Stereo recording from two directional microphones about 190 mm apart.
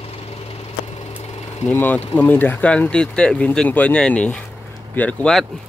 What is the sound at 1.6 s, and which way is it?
Speech, 10° left (ahead or behind).